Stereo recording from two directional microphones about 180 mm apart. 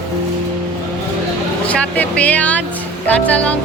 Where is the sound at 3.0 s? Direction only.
10° left (ahead or behind).